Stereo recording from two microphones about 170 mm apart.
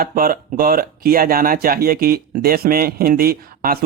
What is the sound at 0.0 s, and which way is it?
Speech, 60° right (ahead or behind).